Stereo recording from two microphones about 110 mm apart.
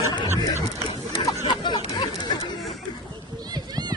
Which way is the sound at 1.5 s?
45° left (ahead or behind).